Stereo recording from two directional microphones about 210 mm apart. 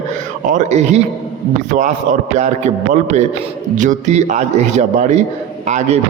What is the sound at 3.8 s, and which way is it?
A man's voice, 35° right (ahead or behind).